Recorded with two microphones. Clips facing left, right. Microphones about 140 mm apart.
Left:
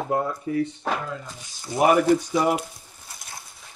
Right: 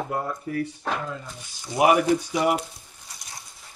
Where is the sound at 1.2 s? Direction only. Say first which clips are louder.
Left 1 dB; 10° left (ahead or behind).